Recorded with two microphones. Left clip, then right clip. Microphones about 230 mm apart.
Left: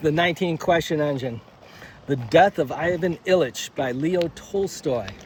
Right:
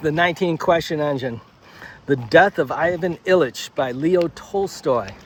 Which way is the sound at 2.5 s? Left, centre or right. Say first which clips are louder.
Right 3 dB; right.